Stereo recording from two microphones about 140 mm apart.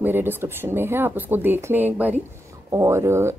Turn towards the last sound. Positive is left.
turn(degrees=-20)  # may be behind; listen again after turning